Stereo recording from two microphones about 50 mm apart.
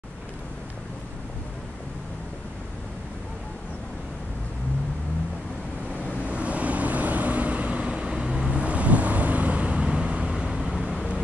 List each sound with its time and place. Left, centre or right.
6.0 s vehicle: right
10.4 s vehicle: centre